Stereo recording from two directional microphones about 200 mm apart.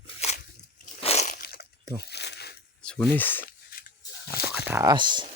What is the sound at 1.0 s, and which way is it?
Crunch, 30° left (ahead or behind).